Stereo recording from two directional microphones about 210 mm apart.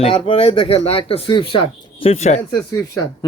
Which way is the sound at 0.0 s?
25° left (ahead or behind).